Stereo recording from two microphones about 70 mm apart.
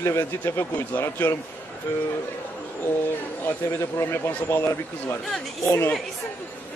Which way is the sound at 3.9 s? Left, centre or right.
Left.